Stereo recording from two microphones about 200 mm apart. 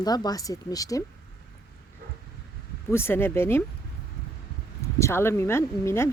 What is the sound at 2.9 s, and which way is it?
Speech, 10° left (ahead or behind).